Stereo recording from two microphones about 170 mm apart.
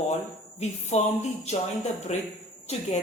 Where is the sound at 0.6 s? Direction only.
40° left (ahead or behind).